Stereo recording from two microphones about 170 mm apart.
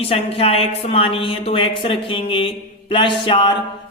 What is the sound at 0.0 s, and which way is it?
Speech, 35° left (ahead or behind).